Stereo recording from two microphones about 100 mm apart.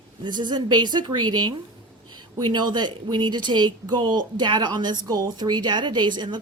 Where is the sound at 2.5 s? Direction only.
50° right (ahead or behind).